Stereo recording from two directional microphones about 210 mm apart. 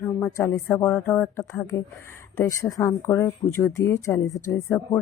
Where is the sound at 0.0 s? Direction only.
10° left (ahead or behind).